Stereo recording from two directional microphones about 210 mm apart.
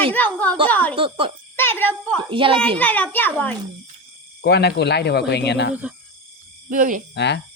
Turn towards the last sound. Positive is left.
turn(degrees=55)  # may be behind; listen again after turning